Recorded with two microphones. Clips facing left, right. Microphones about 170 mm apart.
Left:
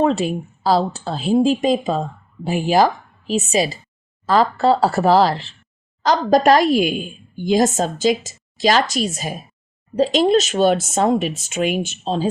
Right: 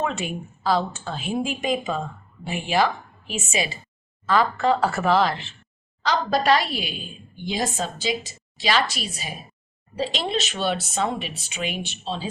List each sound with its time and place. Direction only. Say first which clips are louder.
0.0 s a woman's voice: left 9 dB; 35° left (ahead or behind)